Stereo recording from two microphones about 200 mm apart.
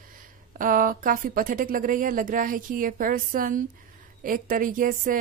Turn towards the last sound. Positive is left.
turn(degrees=-45)  # may be behind; listen again after turning